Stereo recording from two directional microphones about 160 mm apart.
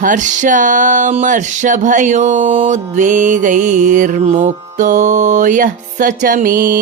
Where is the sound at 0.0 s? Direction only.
55° right (ahead or behind).